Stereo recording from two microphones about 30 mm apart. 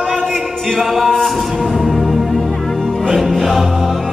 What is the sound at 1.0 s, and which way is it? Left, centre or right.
Music, centre.